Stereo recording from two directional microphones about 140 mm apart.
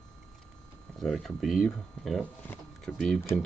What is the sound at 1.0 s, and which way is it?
Speech, centre (ahead or behind).